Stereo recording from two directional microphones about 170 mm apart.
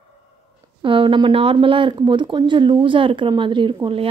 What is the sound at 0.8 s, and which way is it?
Speech, 30° right (ahead or behind).